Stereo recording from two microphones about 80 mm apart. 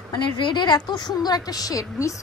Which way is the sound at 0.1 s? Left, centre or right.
Left.